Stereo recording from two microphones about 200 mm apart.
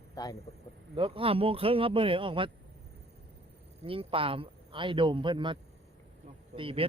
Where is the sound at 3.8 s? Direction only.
25° right (ahead or behind).